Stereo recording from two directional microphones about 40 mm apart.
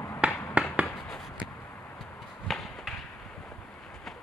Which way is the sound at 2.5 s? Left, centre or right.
Centre.